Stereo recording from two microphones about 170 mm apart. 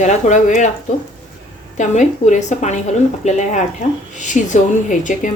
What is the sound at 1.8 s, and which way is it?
A woman's voice, 45° left (ahead or behind).